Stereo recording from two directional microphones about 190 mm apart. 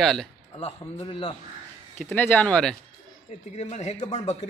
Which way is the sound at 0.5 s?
30° left (ahead or behind).